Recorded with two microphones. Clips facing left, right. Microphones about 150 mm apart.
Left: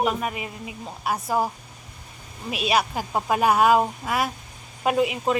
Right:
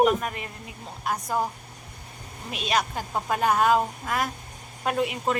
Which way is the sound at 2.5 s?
10° left (ahead or behind).